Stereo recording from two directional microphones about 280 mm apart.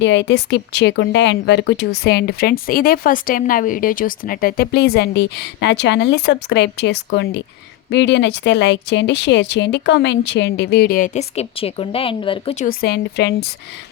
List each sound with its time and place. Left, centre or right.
0.0 s speech: left